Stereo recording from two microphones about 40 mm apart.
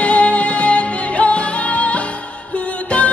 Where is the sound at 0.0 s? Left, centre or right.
Left.